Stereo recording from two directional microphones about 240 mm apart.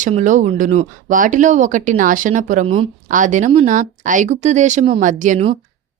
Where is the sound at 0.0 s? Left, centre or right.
Right.